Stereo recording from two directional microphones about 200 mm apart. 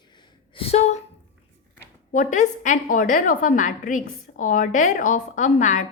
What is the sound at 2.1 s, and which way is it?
A woman's voice, 40° left (ahead or behind).